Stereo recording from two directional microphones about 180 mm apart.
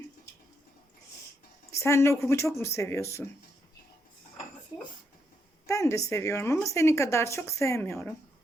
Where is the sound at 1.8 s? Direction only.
15° left (ahead or behind).